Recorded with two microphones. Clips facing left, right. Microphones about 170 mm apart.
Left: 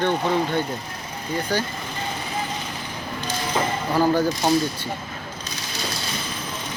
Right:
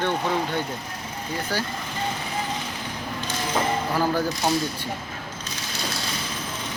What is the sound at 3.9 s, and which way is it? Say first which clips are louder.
Speech: left 8 dB; 15° left (ahead or behind).